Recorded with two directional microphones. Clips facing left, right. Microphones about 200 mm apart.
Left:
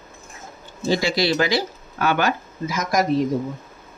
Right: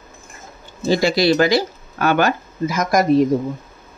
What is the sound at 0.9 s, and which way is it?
Speech, 45° right (ahead or behind).